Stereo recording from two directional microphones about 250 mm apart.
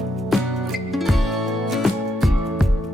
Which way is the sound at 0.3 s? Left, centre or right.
Centre.